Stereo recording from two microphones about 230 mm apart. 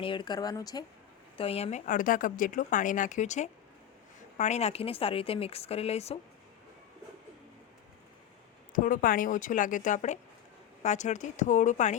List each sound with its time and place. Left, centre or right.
0.0 s speech: left
8.7 s speech: left